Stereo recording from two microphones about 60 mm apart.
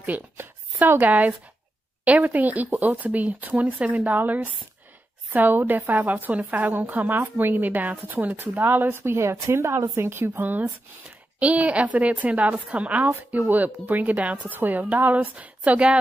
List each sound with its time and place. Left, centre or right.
0.4 s a woman's voice: right
11.1 s a woman's voice: right